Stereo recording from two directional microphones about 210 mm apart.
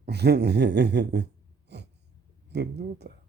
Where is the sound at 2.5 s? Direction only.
50° right (ahead or behind).